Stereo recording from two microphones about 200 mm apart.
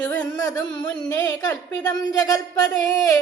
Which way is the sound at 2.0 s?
20° left (ahead or behind).